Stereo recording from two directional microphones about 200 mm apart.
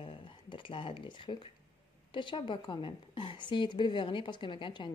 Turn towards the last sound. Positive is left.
turn(degrees=25)  # may be behind; listen again after turning